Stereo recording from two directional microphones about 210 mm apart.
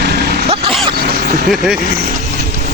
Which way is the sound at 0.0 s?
50° right (ahead or behind).